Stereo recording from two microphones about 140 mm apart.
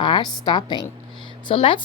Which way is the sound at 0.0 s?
30° left (ahead or behind).